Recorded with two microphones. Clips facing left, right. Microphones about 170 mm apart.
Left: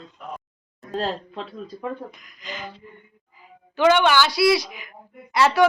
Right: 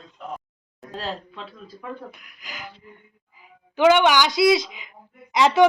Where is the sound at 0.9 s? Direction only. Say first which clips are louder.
Left 5 dB; 40° left (ahead or behind).